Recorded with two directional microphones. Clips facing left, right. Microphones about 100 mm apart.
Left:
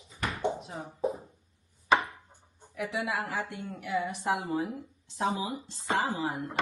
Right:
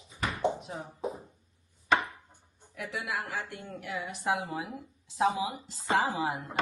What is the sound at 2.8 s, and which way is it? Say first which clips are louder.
Speech: left 3 dB; centre (ahead or behind).